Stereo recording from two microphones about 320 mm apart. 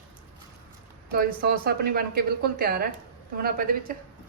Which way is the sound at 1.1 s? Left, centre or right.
Right.